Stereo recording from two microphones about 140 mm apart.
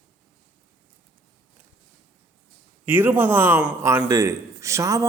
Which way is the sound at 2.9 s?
15° right (ahead or behind).